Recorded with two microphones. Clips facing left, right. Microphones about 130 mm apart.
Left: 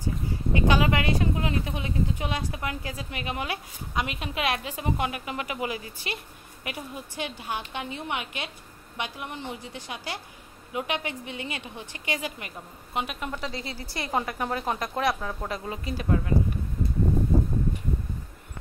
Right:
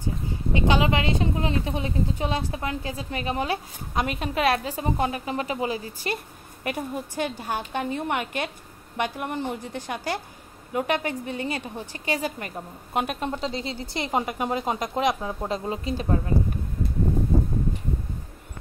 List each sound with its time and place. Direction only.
0.5 s a woman's voice: 25° right (ahead or behind); by 13.2 s 45° right (ahead or behind)
13.2 s speech: 25° right (ahead or behind)